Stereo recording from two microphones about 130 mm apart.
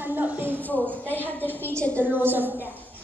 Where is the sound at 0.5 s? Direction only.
15° left (ahead or behind).